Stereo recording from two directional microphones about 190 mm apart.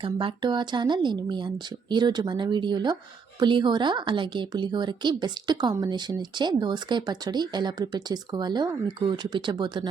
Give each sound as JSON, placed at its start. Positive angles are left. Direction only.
{"t": 0.0, "sound": "a woman's voice", "side_deg": -25}